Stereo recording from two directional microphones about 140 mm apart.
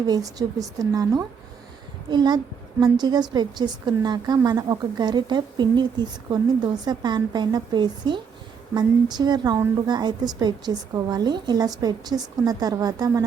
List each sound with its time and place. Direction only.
0.1 s a woman's voice: 25° right (ahead or behind)